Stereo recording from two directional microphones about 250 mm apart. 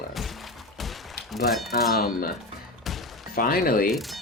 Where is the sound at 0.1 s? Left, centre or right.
Centre.